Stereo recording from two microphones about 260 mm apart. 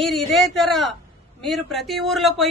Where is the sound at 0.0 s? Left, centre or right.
Centre.